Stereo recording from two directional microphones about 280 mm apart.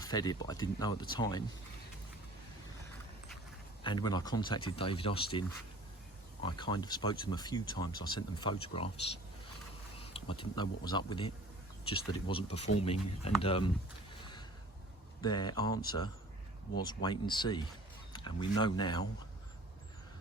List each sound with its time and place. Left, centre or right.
0.0 s speech: centre
3.8 s speech: centre
14.2 s whip: centre
15.2 s speech: centre